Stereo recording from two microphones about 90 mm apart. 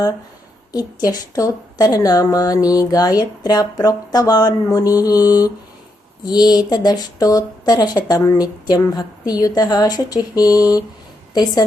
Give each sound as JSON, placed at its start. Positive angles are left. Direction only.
{"t": 0.7, "sound": "speech", "side_deg": 45}
{"t": 6.2, "sound": "speech", "side_deg": 50}